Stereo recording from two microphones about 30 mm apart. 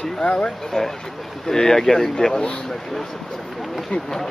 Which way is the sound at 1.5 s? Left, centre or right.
Centre.